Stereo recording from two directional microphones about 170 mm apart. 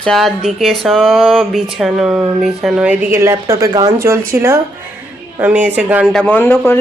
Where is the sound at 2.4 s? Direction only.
5° right (ahead or behind).